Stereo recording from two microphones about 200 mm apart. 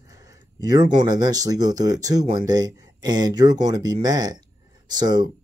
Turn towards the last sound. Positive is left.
turn(degrees=-20)  # may be behind; listen again after turning